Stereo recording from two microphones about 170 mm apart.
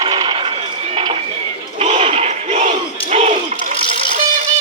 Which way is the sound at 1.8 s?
40° right (ahead or behind).